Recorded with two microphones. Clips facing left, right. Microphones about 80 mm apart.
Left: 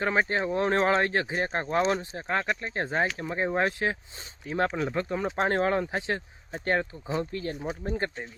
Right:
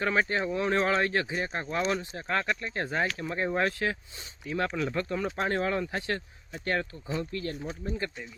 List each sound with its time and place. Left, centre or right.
0.0 s speech: left
4.4 s speech: left
4.9 s speech: centre
5.5 s speech: left
5.9 s speech: centre
7.9 s speech: left